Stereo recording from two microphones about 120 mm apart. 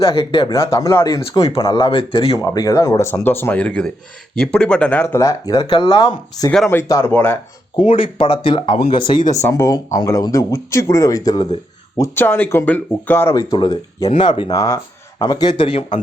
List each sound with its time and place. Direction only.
0.0 s speech: 45° left (ahead or behind)
0.5 s speech: 25° left (ahead or behind); by 2.3 s 45° left (ahead or behind)
2.3 s speech: 30° left (ahead or behind)
7.8 s speech: 45° left (ahead or behind)
9.5 s speech: 30° left (ahead or behind)
12.1 s speech: 15° left (ahead or behind)
13.3 s speech: 35° left (ahead or behind)
14.2 s speech: 45° left (ahead or behind)
14.5 s speech: 30° left (ahead or behind); by 15.8 s 45° left (ahead or behind)